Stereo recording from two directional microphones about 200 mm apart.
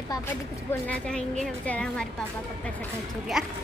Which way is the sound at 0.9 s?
5° left (ahead or behind).